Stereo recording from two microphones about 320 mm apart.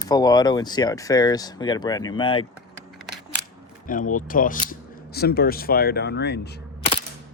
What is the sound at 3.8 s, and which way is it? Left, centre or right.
Speech, left.